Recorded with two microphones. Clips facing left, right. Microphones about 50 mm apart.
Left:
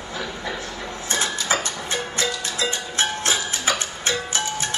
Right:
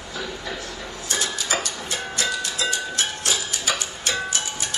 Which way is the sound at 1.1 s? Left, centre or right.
Left.